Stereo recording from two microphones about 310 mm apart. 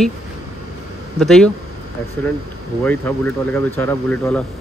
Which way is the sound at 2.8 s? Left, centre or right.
Centre.